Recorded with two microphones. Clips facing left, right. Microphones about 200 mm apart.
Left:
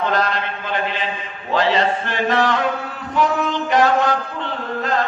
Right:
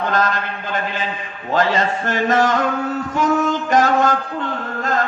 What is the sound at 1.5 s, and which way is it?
A man's voice, 45° right (ahead or behind).